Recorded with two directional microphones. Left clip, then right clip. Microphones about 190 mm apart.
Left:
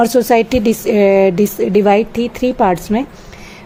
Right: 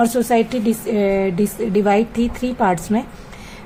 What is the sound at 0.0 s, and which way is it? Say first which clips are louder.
A woman's voice: left 5 dB; 25° left (ahead or behind).